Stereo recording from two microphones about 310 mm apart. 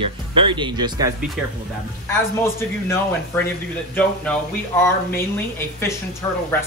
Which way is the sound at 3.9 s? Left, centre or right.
Centre.